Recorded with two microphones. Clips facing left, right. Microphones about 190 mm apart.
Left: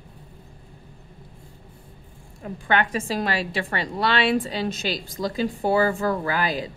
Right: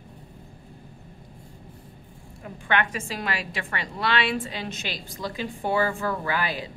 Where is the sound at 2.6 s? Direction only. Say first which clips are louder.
Left 3 dB; 35° left (ahead or behind).